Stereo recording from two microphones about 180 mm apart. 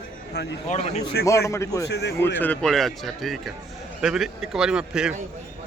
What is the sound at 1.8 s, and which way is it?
Speech, 70° left (ahead or behind).